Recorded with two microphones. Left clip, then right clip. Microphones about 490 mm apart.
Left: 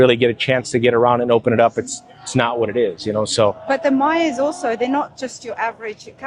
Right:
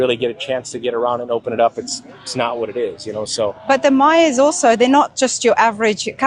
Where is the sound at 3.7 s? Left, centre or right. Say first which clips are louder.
Right 4 dB; right.